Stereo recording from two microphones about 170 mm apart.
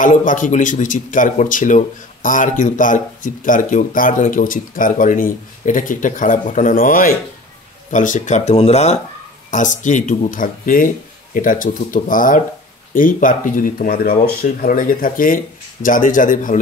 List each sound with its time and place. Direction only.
0.0 s speech: 50° left (ahead or behind)